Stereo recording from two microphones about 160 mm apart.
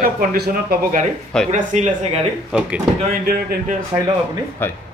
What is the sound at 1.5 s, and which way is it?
Speech, 50° right (ahead or behind).